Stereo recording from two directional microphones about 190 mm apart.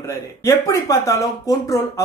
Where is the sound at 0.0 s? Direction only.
15° left (ahead or behind).